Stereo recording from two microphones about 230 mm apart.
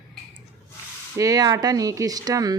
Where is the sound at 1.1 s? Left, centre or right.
Centre.